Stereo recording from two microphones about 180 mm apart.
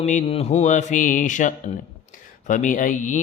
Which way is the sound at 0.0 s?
35° left (ahead or behind).